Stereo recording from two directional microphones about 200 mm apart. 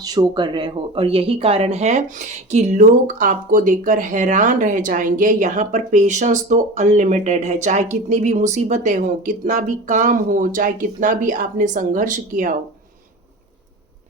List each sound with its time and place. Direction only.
0.0 s speech: 20° right (ahead or behind); by 12.5 s 40° right (ahead or behind)